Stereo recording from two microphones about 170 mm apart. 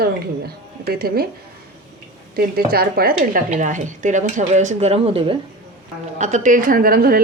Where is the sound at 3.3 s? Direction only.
50° right (ahead or behind); by 5.4 s 30° right (ahead or behind).